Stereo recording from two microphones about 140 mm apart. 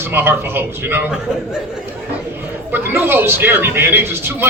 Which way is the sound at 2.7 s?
15° right (ahead or behind).